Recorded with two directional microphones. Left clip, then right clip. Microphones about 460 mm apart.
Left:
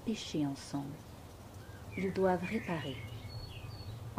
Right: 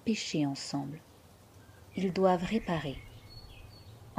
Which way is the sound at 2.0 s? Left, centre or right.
Centre.